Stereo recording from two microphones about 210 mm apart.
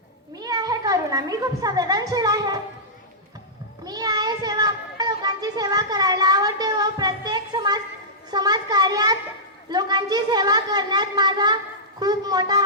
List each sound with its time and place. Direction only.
0.3 s speech: 20° right (ahead or behind)
3.8 s a sound: 20° right (ahead or behind)
8.3 s a child's voice: 20° right (ahead or behind)